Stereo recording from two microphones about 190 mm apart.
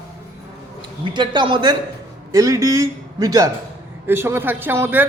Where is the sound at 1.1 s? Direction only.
25° right (ahead or behind).